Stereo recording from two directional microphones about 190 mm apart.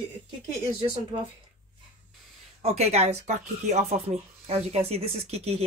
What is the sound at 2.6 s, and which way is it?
Speech, 35° right (ahead or behind).